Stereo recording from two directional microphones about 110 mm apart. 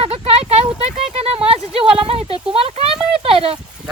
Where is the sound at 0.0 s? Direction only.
65° right (ahead or behind).